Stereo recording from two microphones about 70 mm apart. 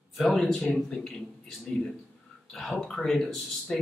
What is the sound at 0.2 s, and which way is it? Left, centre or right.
A man's voice, centre.